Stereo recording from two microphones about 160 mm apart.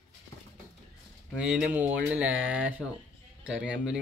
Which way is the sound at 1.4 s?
5° right (ahead or behind).